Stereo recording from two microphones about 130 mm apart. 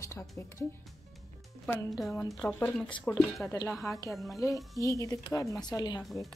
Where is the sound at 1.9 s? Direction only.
Centre (ahead or behind).